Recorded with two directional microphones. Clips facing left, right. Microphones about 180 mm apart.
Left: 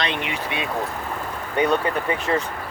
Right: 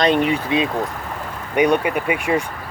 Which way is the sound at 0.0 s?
40° right (ahead or behind).